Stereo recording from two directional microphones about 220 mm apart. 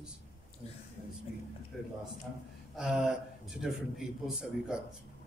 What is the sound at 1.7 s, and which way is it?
A man's voice, centre (ahead or behind).